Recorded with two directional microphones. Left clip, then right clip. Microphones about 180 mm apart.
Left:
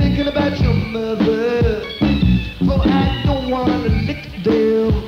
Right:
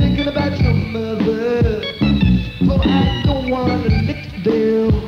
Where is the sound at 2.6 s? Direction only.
50° left (ahead or behind).